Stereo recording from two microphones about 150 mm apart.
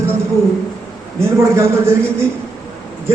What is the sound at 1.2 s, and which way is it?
Speech, 15° right (ahead or behind).